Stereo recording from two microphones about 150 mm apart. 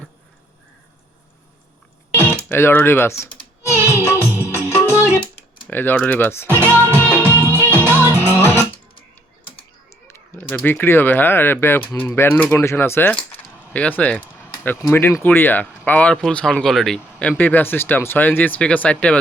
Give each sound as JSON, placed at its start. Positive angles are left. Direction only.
{"t": 2.5, "sound": "speech", "side_deg": 15}
{"t": 3.8, "sound": "music", "side_deg": -15}
{"t": 4.0, "sound": "music", "side_deg": 15}
{"t": 5.6, "sound": "speech", "side_deg": 10}
{"t": 6.7, "sound": "music", "side_deg": 15}
{"t": 7.0, "sound": "music", "side_deg": -15}
{"t": 10.1, "sound": "speech", "side_deg": 10}